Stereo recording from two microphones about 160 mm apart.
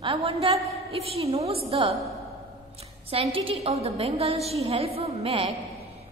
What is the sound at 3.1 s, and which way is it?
A woman's voice, 35° right (ahead or behind).